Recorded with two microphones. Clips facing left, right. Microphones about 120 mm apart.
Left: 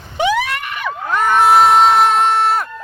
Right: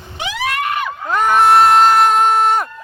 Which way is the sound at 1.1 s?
5° right (ahead or behind).